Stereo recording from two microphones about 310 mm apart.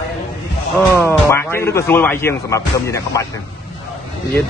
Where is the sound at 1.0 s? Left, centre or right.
Centre.